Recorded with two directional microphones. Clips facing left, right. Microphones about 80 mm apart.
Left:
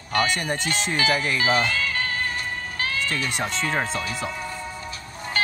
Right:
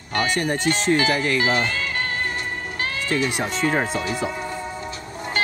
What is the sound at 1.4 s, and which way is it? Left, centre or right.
Music, right.